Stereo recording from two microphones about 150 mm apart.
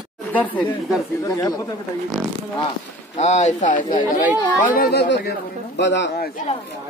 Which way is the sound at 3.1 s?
50° left (ahead or behind).